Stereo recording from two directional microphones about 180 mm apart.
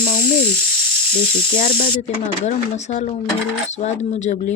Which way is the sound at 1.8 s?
40° left (ahead or behind).